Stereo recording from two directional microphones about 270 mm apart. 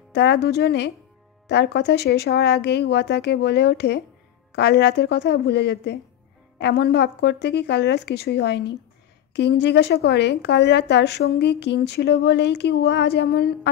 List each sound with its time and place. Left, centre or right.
0.1 s a woman's voice: left